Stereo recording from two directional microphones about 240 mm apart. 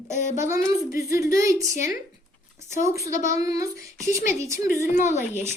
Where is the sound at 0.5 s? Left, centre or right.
Centre.